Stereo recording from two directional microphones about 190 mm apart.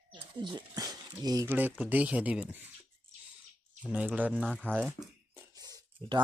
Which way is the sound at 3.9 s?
5° right (ahead or behind).